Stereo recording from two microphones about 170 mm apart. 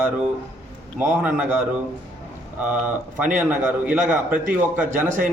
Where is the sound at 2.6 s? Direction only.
10° right (ahead or behind).